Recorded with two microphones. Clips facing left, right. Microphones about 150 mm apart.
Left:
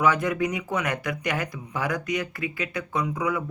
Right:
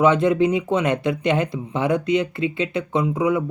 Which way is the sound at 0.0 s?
25° right (ahead or behind).